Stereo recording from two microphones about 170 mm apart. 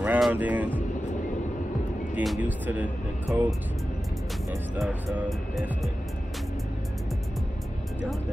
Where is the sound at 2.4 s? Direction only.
10° right (ahead or behind).